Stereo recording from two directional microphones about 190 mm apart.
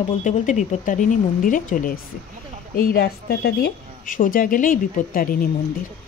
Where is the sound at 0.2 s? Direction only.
40° left (ahead or behind).